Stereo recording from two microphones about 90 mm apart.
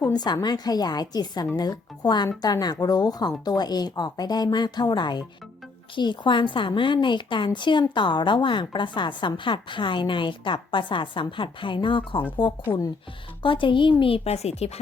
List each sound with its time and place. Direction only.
0.1 s a woman's voice: 50° left (ahead or behind); by 13.9 s 65° left (ahead or behind)